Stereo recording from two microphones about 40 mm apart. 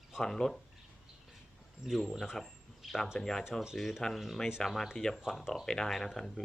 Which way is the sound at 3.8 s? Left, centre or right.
Centre.